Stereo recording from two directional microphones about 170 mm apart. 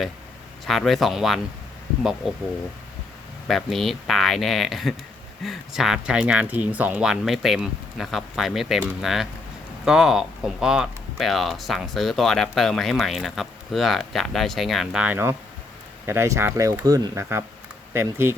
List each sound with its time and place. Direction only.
0.6 s speech: centre (ahead or behind)
3.4 s speech: centre (ahead or behind)